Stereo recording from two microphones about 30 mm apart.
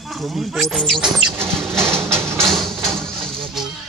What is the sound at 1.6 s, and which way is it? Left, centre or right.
Music, centre.